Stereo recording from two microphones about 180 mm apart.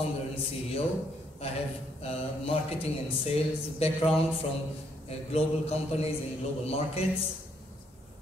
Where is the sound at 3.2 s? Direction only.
35° left (ahead or behind).